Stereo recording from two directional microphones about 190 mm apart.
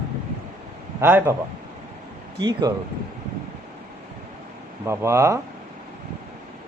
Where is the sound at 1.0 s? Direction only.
10° right (ahead or behind).